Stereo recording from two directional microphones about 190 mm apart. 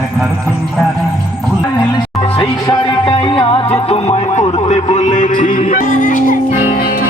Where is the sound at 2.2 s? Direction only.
25° left (ahead or behind); by 6.3 s 45° left (ahead or behind).